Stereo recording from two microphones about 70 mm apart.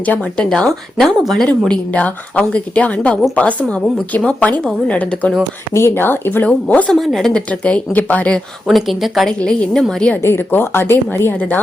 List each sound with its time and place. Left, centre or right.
0.0 s speech: centre
1.9 s speech: left
5.7 s speech: left; by 6.9 s centre
7.0 s speech: centre
7.6 s speech: left
8.6 s speech: centre
9.4 s speech: centre
10.2 s a woman's voice: left